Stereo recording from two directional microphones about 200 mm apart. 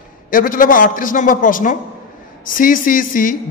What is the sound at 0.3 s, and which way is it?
Speech, 45° left (ahead or behind).